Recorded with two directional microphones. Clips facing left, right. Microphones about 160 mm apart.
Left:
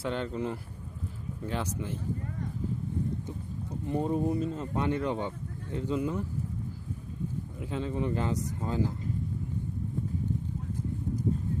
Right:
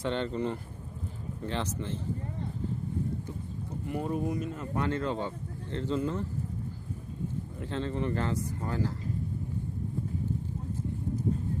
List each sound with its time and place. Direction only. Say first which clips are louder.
0.0 s speech: right 1 dB; 5° left (ahead or behind)
3.8 s speech: left 3 dB; 25° left (ahead or behind); by 6.2 s 10° left (ahead or behind)
7.6 s speech: even; 10° left (ahead or behind)